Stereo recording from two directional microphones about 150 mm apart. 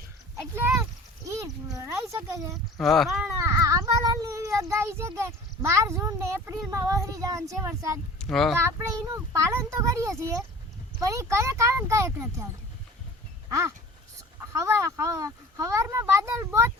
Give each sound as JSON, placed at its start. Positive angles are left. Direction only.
{"t": 0.5, "sound": "speech", "side_deg": -15}
{"t": 2.7, "sound": "speech", "side_deg": 0}
{"t": 3.3, "sound": "a child's voice", "side_deg": -20}
{"t": 8.2, "sound": "speech", "side_deg": 0}
{"t": 8.5, "sound": "speech", "side_deg": -15}
{"t": 13.5, "sound": "speech", "side_deg": -20}